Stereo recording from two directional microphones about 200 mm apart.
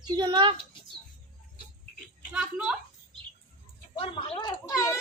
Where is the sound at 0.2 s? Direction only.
20° right (ahead or behind).